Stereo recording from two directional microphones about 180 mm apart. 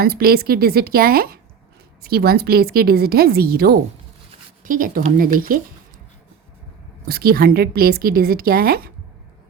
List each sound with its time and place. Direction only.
0.0 s a woman's voice: 55° right (ahead or behind)
7.1 s a woman's voice: 55° right (ahead or behind)